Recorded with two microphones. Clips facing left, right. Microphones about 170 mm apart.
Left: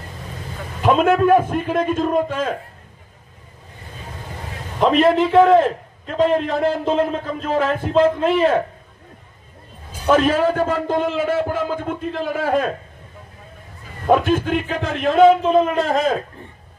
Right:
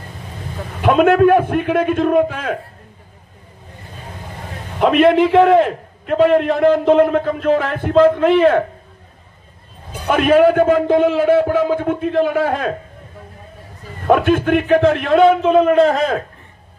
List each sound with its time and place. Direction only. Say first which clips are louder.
0.8 s a man's voice: right 3 dB; 60° right (ahead or behind)
4.8 s a man's voice: right 3 dB; 65° right (ahead or behind)
9.9 s a man's voice: right 3 dB; 60° right (ahead or behind)
14.1 s a man's voice: right 3 dB; 60° right (ahead or behind)